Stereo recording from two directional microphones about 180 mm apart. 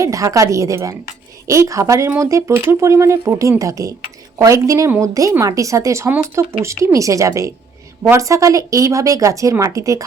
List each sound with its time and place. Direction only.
0.0 s speech: 20° right (ahead or behind)